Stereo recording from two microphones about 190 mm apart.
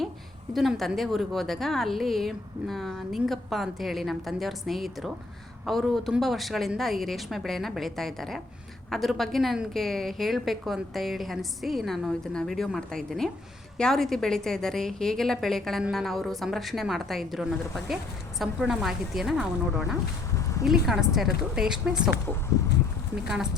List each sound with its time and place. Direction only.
0.5 s a woman's voice: centre (ahead or behind)
20.3 s a sound: 15° left (ahead or behind)
20.7 s a woman's voice: centre (ahead or behind)